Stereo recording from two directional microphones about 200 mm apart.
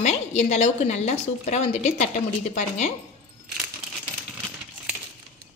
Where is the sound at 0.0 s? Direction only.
35° left (ahead or behind).